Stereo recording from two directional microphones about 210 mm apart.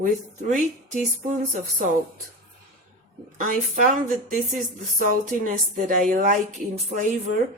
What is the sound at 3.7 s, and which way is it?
Speech, 40° right (ahead or behind).